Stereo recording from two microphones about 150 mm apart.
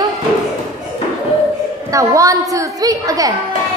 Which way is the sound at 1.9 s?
20° right (ahead or behind).